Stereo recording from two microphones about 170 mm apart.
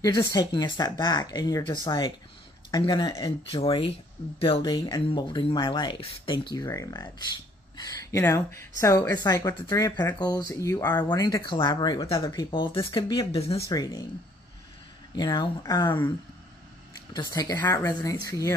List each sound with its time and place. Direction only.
0.0 s speech: 20° left (ahead or behind)
11.0 s speech: 25° left (ahead or behind)
15.1 s speech: 25° left (ahead or behind)
17.1 s speech: 25° left (ahead or behind)